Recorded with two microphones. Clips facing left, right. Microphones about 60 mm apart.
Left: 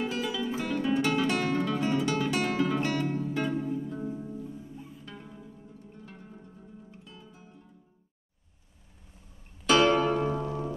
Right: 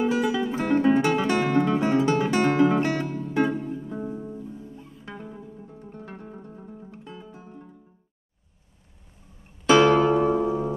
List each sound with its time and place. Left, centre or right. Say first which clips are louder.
0.0 s music: right 8 dB; centre
0.7 s music: right 9 dB; right
1.0 s guitar: right 4 dB; centre
1.5 s guitar: right 6 dB; right
2.5 s music: right 8 dB; right
2.8 s music: right 3 dB; right
5.7 s music: right 7 dB; right
10.1 s music: right 8 dB; right